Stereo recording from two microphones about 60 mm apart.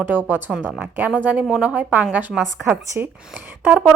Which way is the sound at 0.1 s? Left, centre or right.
Right.